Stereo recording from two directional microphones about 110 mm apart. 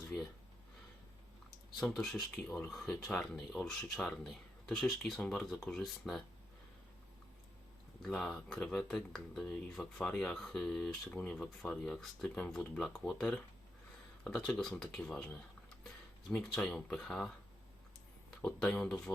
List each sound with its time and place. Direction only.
1.5 s speech: 5° left (ahead or behind)
8.0 s speech: centre (ahead or behind)
14.3 s speech: 5° left (ahead or behind)
16.6 s speech: 10° left (ahead or behind)
18.4 s speech: 10° left (ahead or behind)